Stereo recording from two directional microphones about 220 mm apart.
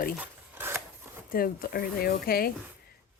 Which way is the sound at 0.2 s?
10° right (ahead or behind).